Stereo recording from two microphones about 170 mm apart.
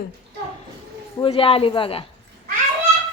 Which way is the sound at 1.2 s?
35° left (ahead or behind).